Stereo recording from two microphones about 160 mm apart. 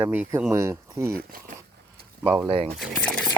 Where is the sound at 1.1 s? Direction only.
70° right (ahead or behind).